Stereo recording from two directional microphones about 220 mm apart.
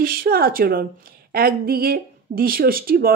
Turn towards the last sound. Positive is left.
turn(degrees=-40)  # may be behind; listen again after turning